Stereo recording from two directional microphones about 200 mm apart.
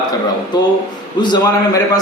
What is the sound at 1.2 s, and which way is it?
Speech, 20° left (ahead or behind).